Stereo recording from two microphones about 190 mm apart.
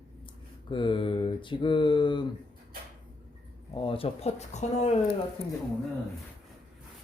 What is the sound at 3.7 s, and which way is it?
Speech, 25° left (ahead or behind).